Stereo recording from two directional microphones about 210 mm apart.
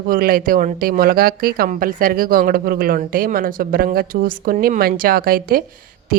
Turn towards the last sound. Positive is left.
turn(degrees=-45)  # may be behind; listen again after turning